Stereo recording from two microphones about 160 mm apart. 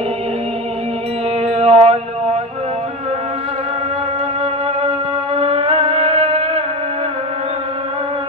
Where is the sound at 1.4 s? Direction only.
40° right (ahead or behind).